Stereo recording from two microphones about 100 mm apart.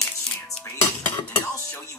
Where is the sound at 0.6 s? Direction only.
20° left (ahead or behind).